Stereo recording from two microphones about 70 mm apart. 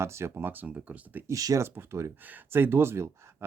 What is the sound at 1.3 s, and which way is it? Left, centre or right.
Speech, right.